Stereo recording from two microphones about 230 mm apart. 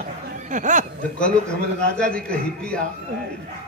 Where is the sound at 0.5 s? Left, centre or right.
Right.